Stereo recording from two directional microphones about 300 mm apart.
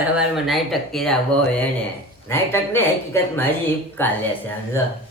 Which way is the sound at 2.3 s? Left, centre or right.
Centre.